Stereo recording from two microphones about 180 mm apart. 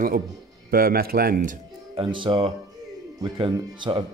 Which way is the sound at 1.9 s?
30° right (ahead or behind).